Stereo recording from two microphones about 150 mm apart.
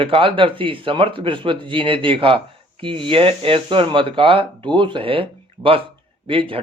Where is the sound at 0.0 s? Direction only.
35° right (ahead or behind).